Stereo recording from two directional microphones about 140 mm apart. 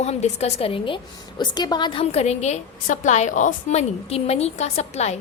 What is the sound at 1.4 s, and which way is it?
A woman's voice, 30° left (ahead or behind).